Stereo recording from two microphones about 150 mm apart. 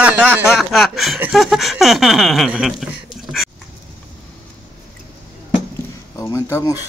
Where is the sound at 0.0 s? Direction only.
10° right (ahead or behind).